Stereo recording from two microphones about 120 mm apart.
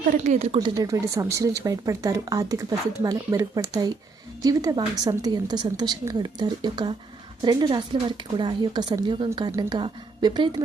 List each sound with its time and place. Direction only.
0.3 s speech: 55° right (ahead or behind)
0.6 s a woman's voice: 30° right (ahead or behind)